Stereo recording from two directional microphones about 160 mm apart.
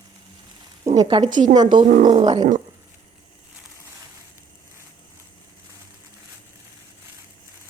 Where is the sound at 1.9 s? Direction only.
60° right (ahead or behind).